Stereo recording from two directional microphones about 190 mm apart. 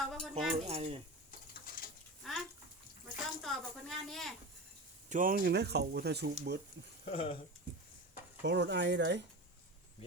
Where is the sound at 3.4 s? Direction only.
Centre (ahead or behind).